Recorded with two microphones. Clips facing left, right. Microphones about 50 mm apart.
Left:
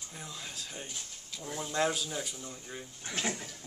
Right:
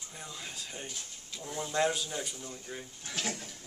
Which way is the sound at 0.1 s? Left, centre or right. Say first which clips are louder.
Even; centre.